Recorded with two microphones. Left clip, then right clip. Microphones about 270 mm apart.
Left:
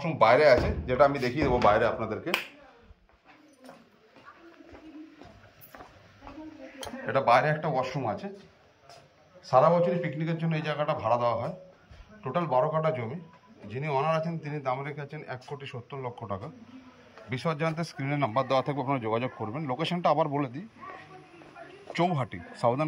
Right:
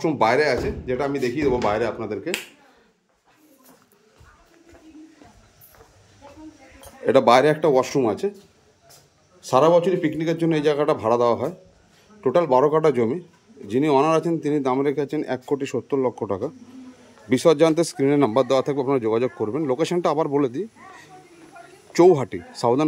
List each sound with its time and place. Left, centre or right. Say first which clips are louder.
0.0 s a man's voice: right 2 dB; centre
7.1 s speech: right 8 dB; right
9.4 s speech: right 5 dB; right
21.9 s speech: right 13 dB; right